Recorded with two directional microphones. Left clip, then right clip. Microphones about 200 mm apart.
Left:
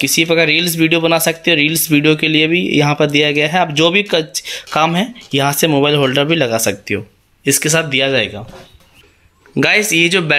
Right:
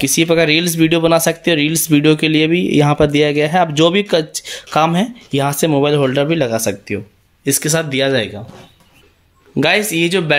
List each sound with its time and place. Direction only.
0.0 s speech: 15° right (ahead or behind)
9.6 s speech: 5° right (ahead or behind)